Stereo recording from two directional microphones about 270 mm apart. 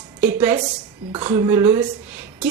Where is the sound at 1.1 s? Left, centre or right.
Centre.